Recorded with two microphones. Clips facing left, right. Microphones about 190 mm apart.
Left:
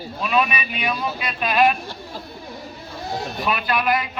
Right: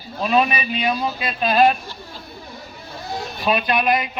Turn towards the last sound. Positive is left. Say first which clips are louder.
# right 2 dB
turn(degrees=-20)  # may be behind; listen again after turning